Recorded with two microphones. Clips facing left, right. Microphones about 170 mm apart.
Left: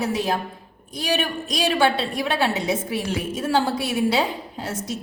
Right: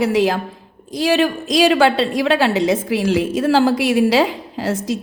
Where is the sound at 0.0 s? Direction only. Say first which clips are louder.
Right 7 dB; 90° right.